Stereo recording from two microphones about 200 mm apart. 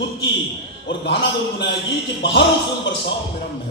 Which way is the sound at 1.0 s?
60° left (ahead or behind).